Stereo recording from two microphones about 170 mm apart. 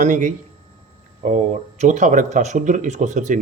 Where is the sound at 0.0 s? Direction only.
50° right (ahead or behind).